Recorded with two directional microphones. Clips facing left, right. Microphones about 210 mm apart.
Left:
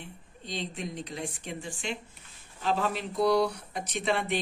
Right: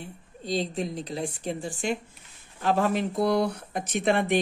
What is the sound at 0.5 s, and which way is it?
Speech, 35° right (ahead or behind).